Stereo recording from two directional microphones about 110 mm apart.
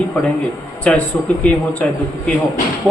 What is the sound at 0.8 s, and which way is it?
A man's voice, 10° left (ahead or behind).